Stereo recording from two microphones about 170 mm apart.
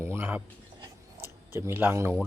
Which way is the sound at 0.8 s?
15° right (ahead or behind).